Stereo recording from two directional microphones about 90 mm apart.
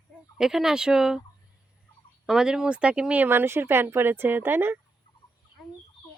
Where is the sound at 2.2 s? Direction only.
5° right (ahead or behind); by 4.8 s 25° right (ahead or behind).